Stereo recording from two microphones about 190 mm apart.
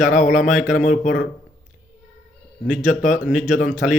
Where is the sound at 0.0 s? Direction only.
45° left (ahead or behind).